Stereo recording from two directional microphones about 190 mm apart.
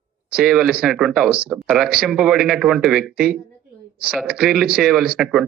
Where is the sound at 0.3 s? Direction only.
5° right (ahead or behind).